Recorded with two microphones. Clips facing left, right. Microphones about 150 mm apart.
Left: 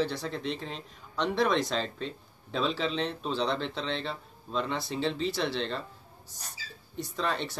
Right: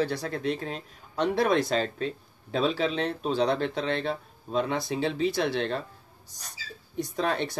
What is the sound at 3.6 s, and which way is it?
Speech, 55° right (ahead or behind).